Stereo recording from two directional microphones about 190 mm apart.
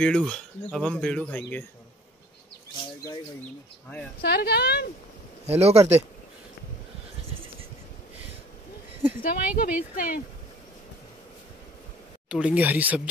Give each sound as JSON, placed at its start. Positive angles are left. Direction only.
{"t": 0.0, "sound": "speech", "side_deg": 5}
{"t": 4.2, "sound": "speech", "side_deg": 55}
{"t": 5.5, "sound": "speech", "side_deg": -35}
{"t": 9.2, "sound": "a woman's voice", "side_deg": 50}
{"t": 12.3, "sound": "speech", "side_deg": -5}